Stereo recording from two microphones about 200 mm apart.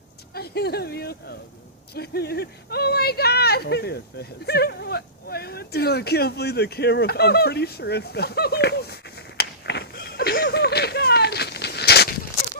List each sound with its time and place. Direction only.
0.3 s speech: 55° left (ahead or behind)